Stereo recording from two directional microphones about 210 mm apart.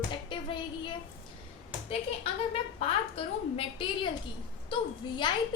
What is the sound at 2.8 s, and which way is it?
A woman's voice, 25° left (ahead or behind).